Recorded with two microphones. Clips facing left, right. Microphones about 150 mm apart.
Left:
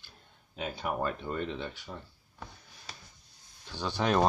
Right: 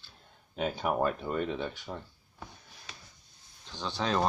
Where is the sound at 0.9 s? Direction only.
10° right (ahead or behind).